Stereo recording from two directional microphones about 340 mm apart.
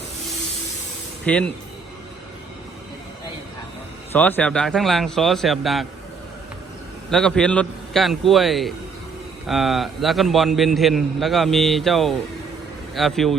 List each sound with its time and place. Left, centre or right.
1.2 s speech: centre
4.1 s a man's voice: centre
7.1 s a man's voice: centre